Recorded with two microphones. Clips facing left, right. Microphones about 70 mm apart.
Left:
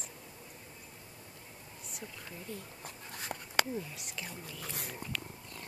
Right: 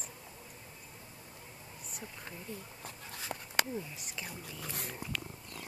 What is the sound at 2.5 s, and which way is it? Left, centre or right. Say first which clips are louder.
Speech: left 1 dB; centre.